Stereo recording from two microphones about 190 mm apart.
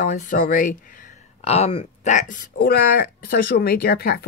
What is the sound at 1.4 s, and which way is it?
Speech, 35° left (ahead or behind).